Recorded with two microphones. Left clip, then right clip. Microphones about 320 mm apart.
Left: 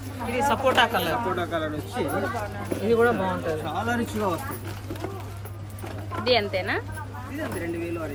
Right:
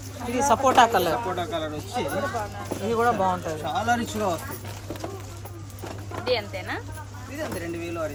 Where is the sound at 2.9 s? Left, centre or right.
Centre.